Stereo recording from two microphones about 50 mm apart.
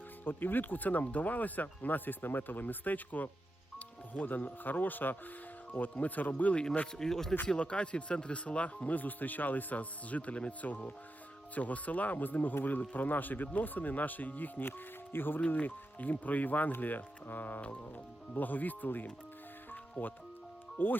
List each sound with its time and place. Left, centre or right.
0.3 s speech: left
6.9 s speech: centre
7.4 s speech: left
19.7 s music: left
20.7 s speech: left